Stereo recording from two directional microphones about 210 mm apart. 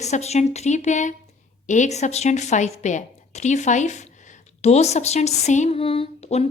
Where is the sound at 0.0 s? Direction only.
30° left (ahead or behind).